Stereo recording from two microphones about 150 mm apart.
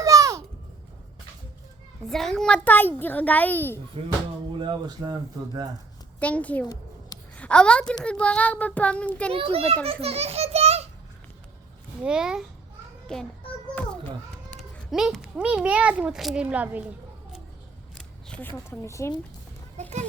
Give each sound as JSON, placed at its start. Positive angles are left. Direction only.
{"t": 0.0, "sound": "a sound", "side_deg": -20}
{"t": 2.0, "sound": "a child's voice", "side_deg": 0}
{"t": 4.0, "sound": "a child's voice", "side_deg": -40}
{"t": 6.1, "sound": "a child's voice", "side_deg": 10}
{"t": 9.3, "sound": "a child's voice", "side_deg": -40}
{"t": 12.0, "sound": "a child's voice", "side_deg": -5}
{"t": 14.8, "sound": "a child's voice", "side_deg": 0}
{"t": 17.9, "sound": "speech", "side_deg": 10}